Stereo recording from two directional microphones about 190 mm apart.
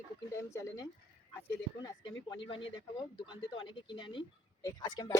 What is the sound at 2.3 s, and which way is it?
Speech, 25° left (ahead or behind).